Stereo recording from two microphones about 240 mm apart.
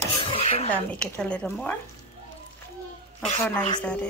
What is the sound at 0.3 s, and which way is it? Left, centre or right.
Dishes, left.